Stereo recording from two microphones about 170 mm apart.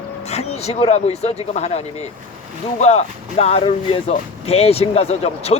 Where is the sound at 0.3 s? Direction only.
40° left (ahead or behind).